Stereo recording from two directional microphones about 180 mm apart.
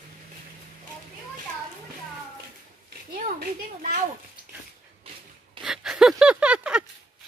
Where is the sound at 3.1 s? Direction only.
50° right (ahead or behind).